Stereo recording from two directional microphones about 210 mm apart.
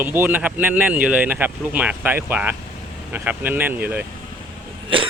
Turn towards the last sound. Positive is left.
turn(degrees=-25)  # may be behind; listen again after turning